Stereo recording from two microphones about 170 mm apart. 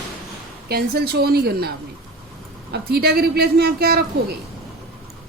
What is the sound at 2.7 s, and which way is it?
A woman's voice, 70° right (ahead or behind).